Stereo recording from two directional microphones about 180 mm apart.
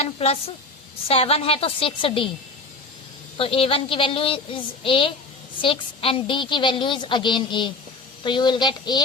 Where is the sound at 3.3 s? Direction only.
30° left (ahead or behind).